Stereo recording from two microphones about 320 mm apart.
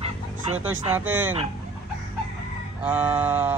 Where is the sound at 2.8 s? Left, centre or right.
Centre.